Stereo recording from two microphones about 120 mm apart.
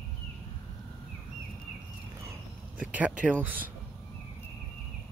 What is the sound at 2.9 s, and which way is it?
Speech, 10° right (ahead or behind).